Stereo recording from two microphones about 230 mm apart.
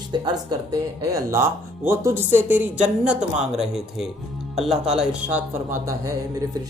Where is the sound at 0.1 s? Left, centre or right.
Centre.